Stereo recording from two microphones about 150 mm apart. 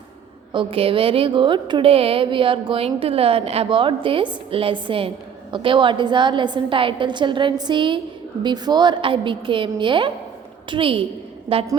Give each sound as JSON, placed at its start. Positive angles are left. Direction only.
{"t": 0.5, "sound": "speech", "side_deg": -35}